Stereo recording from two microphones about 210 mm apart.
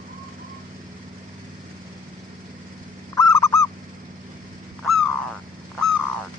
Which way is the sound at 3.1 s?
15° left (ahead or behind).